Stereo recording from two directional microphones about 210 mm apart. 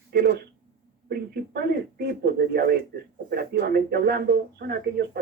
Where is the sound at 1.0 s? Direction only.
50° right (ahead or behind).